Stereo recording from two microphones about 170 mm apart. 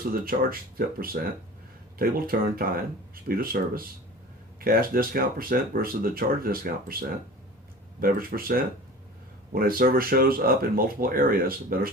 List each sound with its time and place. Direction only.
0.3 s speech: 50° right (ahead or behind)
7.9 s speech: 60° right (ahead or behind)